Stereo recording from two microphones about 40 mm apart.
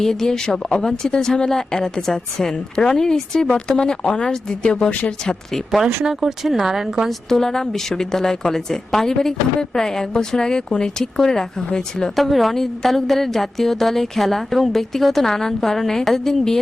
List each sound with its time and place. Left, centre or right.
0.0 s speech: centre
5.7 s speech: centre
7.1 s speech: centre
12.1 s a woman's voice: centre